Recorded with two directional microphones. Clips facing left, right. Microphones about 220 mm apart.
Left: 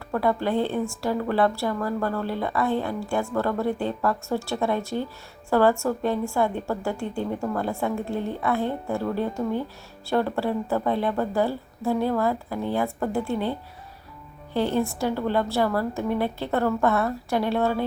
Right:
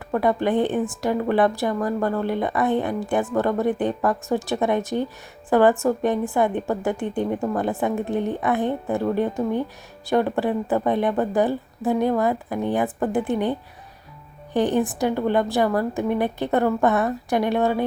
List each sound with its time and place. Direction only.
0.1 s a woman's voice: 20° right (ahead or behind)